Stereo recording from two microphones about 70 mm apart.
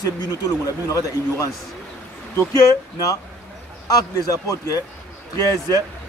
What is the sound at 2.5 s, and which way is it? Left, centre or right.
Speech, left.